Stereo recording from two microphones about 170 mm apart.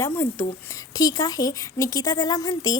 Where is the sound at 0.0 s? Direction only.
15° left (ahead or behind).